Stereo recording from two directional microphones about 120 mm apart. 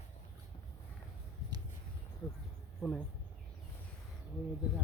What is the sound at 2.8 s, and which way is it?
Insect, 5° left (ahead or behind).